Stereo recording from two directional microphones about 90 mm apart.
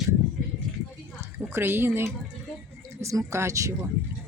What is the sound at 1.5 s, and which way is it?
Speech, 25° right (ahead or behind).